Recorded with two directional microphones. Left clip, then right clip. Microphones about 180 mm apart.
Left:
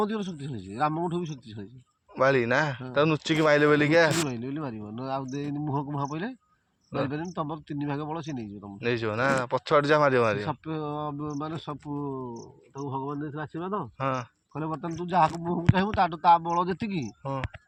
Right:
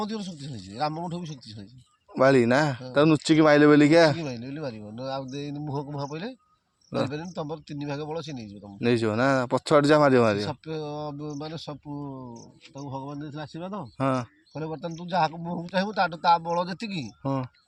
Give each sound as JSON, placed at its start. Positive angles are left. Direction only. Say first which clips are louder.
{"t": 0.0, "sound": "speech", "louder": "left 4 dB", "side_deg": 0}
{"t": 2.1, "sound": "speech", "louder": "right 3 dB", "side_deg": -90}
{"t": 4.3, "sound": "speech", "louder": "even", "side_deg": -5}
{"t": 8.8, "sound": "speech", "louder": "right 3 dB", "side_deg": -80}
{"t": 10.4, "sound": "speech", "louder": "even", "side_deg": -5}
{"t": 14.0, "sound": "speech", "louder": "right 4 dB", "side_deg": -80}
{"t": 14.5, "sound": "speech", "louder": "left 1 dB", "side_deg": -5}